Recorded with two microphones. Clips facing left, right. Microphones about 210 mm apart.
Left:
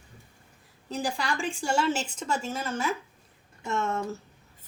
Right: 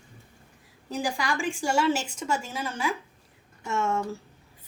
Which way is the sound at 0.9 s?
15° right (ahead or behind).